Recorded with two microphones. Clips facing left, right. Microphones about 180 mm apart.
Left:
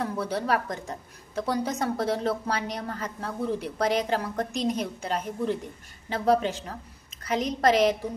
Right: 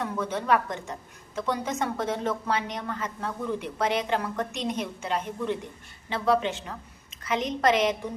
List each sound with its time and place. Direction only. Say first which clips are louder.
0.0 s a woman's voice: left 1 dB; 35° left (ahead or behind)